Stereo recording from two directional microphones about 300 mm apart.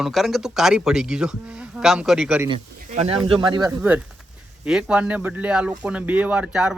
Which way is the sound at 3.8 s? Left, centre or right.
Centre.